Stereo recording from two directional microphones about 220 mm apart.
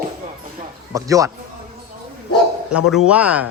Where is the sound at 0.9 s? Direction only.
15° right (ahead or behind).